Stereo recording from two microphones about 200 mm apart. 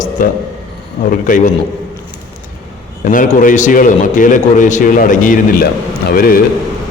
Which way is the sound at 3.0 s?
40° left (ahead or behind).